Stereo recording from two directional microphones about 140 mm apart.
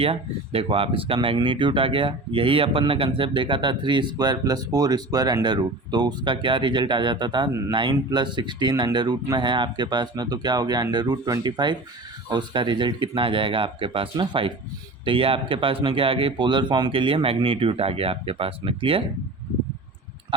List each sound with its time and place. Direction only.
0.0 s speech: 40° right (ahead or behind)